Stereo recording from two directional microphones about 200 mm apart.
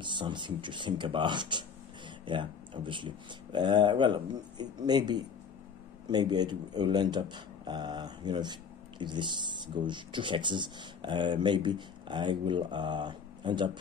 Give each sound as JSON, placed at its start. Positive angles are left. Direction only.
{"t": 0.0, "sound": "speech", "side_deg": -25}